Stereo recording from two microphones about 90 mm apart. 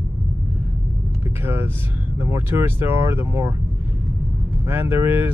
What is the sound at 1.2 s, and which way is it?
Vehicle, 25° right (ahead or behind).